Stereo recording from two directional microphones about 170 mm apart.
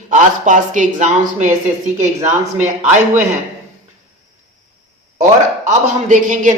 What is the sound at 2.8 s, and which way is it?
Speech, 45° right (ahead or behind).